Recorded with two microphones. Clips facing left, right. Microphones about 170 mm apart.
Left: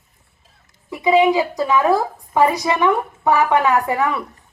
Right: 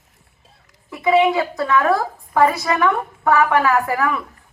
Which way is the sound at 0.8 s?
15° left (ahead or behind).